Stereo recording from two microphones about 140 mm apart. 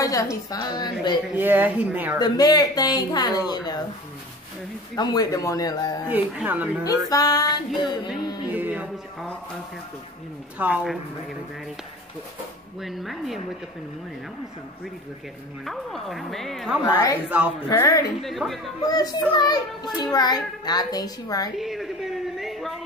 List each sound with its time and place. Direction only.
0.0 s speech: 25° left (ahead or behind)
1.3 s speech: 15° right (ahead or behind)
2.1 s speech: 30° left (ahead or behind)
4.9 s speech: 25° left (ahead or behind)
6.0 s speech: 10° right (ahead or behind)
6.8 s speech: 25° left (ahead or behind)
8.5 s speech: 10° right (ahead or behind)
10.6 s speech: 5° right (ahead or behind)
12.8 s a woman's voice: centre (ahead or behind)
15.6 s a woman's voice: centre (ahead or behind)
16.8 s speech: 25° left (ahead or behind)
18.2 s a woman's voice: centre (ahead or behind)
19.3 s speech: 30° left (ahead or behind)
21.5 s a woman's voice: centre (ahead or behind)